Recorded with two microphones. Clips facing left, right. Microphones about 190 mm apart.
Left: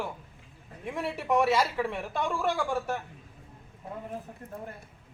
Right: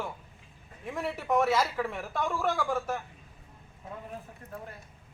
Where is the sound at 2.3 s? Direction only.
30° left (ahead or behind).